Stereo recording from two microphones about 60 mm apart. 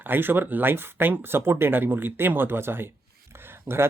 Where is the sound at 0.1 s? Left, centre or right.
Right.